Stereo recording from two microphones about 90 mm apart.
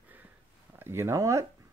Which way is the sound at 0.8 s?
30° right (ahead or behind).